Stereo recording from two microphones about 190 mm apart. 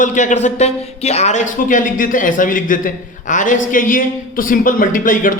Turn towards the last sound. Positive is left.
turn(degrees=45)  # may be behind; listen again after turning